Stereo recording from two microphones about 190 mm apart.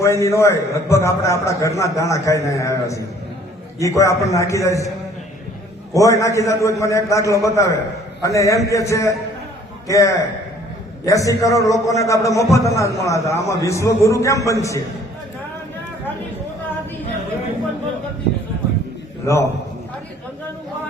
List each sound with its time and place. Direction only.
0.0 s a man's voice: 15° left (ahead or behind)
5.9 s a man's voice: 15° left (ahead or behind)
19.2 s a man's voice: 15° left (ahead or behind)